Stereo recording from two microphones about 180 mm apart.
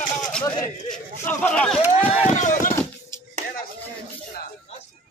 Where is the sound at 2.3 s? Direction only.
45° left (ahead or behind).